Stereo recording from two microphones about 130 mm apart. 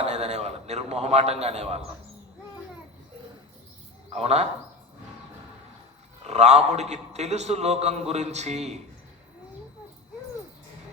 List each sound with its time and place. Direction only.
0.0 s a man's voice: 60° right (ahead or behind)
4.1 s a man's voice: 55° right (ahead or behind)
6.2 s a man's voice: 60° right (ahead or behind)